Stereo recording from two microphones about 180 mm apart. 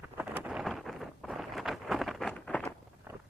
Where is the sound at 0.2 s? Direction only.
10° right (ahead or behind).